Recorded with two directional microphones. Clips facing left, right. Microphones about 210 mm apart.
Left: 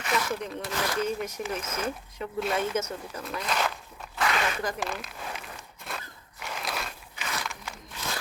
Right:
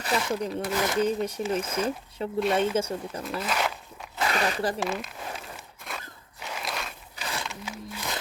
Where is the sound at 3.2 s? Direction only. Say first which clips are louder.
Even; 5° right (ahead or behind).